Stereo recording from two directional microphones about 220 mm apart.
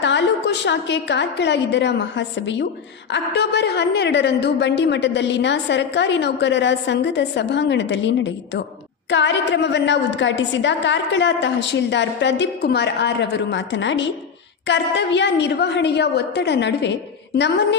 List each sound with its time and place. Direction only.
0.0 s a woman's voice: 55° left (ahead or behind)